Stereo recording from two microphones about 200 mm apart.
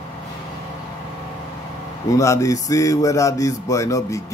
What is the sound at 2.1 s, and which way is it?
Speech, 15° left (ahead or behind).